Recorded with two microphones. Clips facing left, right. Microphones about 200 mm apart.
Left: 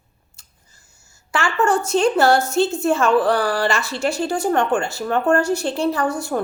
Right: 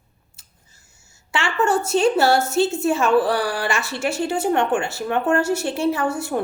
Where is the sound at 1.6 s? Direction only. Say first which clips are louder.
Even; 5° right (ahead or behind).